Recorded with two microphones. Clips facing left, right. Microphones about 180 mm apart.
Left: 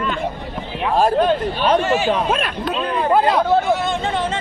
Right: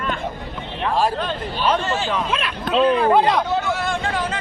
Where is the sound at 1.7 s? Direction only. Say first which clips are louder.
Left 5 dB; 10° left (ahead or behind).